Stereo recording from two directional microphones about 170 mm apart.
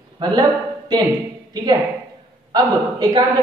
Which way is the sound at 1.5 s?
25° right (ahead or behind).